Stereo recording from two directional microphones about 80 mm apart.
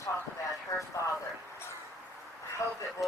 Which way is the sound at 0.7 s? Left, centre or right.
Left.